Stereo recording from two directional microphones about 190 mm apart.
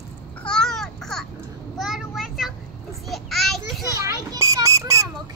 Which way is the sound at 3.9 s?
15° right (ahead or behind).